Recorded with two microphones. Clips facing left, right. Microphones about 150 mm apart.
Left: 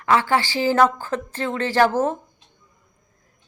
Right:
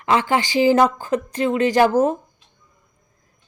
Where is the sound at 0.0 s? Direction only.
20° right (ahead or behind).